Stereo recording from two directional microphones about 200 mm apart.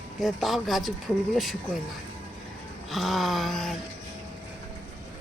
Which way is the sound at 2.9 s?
Centre (ahead or behind).